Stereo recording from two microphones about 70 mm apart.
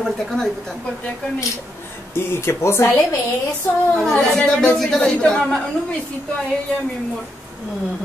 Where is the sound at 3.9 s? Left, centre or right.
Centre.